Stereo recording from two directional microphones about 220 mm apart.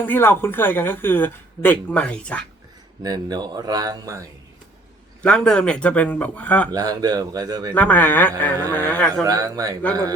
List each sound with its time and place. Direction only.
0.0 s a woman's voice: 10° left (ahead or behind)
3.0 s speech: 20° right (ahead or behind)
5.2 s speech: 5° left (ahead or behind)
6.7 s speech: 15° right (ahead or behind)
7.7 s a woman's voice: 5° left (ahead or behind)
9.2 s speech: 15° right (ahead or behind)